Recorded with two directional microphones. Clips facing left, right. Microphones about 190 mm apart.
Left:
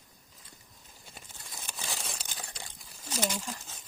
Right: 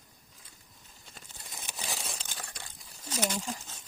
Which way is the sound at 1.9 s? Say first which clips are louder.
Right 1 dB; centre (ahead or behind).